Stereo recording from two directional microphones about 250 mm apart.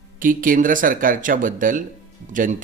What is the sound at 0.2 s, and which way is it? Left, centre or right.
A man's voice, right.